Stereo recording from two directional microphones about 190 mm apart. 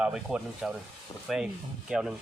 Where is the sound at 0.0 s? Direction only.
5° right (ahead or behind).